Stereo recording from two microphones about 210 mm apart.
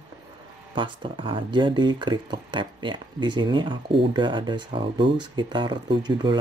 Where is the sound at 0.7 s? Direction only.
25° right (ahead or behind).